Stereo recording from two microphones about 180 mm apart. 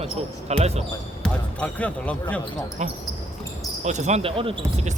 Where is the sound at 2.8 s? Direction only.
40° right (ahead or behind).